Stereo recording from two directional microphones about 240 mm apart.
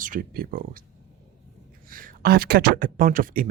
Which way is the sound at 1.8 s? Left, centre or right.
Right.